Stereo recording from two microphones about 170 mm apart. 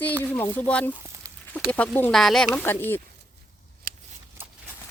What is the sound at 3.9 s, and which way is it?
Shuffling cards, 55° right (ahead or behind).